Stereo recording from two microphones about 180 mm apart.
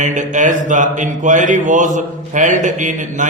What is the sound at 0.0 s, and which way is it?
Speech, 45° right (ahead or behind).